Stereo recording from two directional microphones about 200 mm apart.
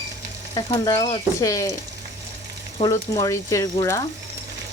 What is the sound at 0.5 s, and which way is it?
Frying, 20° left (ahead or behind).